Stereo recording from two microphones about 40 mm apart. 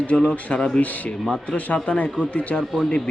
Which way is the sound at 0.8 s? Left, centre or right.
Left.